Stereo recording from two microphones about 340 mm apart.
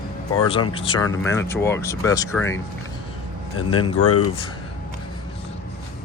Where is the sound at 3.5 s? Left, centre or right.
Left.